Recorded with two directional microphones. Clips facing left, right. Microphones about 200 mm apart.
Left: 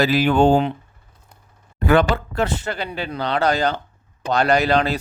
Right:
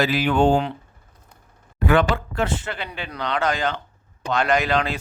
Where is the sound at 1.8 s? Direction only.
40° left (ahead or behind).